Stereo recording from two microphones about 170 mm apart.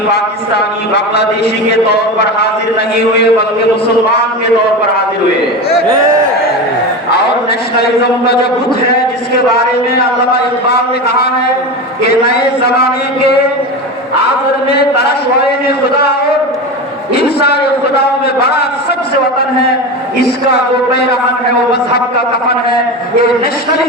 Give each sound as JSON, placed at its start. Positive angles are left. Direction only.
{"t": 0.1, "sound": "a man's voice", "side_deg": 75}
{"t": 7.8, "sound": "a man's voice", "side_deg": 70}
{"t": 9.5, "sound": "a man's voice", "side_deg": 65}
{"t": 17.2, "sound": "a man's voice", "side_deg": 70}
{"t": 20.2, "sound": "a man's voice", "side_deg": 70}